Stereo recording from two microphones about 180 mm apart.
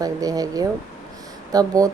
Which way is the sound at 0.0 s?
20° right (ahead or behind).